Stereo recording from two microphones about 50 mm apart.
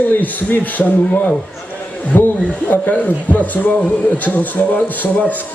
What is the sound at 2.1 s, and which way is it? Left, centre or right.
Speech, left.